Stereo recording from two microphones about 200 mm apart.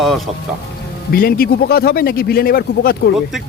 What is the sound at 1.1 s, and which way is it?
A man's voice, 50° left (ahead or behind).